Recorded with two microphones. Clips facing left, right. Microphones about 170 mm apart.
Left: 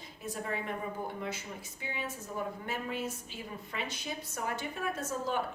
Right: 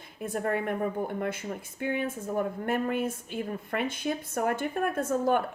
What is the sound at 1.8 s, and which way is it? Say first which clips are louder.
A woman's voice: right 10 dB; 55° right (ahead or behind).